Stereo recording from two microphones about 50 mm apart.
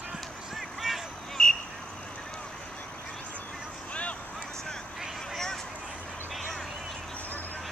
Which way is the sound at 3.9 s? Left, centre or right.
Left.